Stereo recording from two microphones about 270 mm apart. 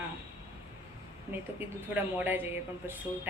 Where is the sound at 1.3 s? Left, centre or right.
Centre.